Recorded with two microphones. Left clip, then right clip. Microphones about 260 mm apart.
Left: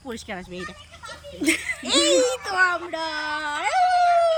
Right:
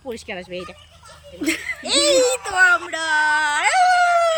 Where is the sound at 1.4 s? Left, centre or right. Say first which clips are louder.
Even; centre.